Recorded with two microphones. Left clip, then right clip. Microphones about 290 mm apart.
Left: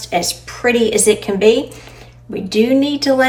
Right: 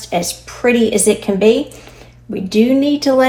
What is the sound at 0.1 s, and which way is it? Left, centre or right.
Speech, centre.